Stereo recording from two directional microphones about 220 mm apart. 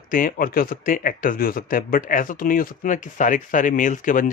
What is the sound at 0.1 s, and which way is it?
A man's voice, 40° left (ahead or behind).